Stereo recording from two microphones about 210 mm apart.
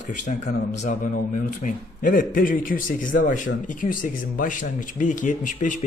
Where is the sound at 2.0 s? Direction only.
40° left (ahead or behind).